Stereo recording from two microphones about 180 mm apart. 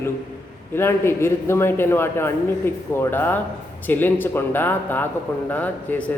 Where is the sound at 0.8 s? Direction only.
15° left (ahead or behind).